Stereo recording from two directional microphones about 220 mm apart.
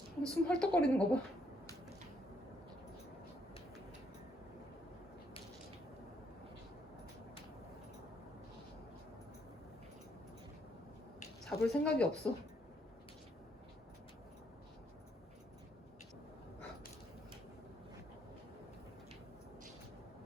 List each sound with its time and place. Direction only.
0.2 s a woman's voice: 5° left (ahead or behind)
11.4 s a woman's voice: 5° left (ahead or behind)